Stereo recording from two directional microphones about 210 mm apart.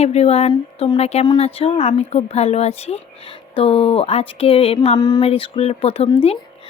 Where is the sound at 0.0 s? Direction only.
30° left (ahead or behind).